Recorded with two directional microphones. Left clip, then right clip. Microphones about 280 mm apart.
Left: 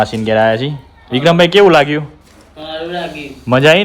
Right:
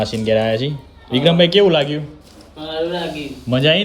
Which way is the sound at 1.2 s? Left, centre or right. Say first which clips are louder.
Left 5 dB; left.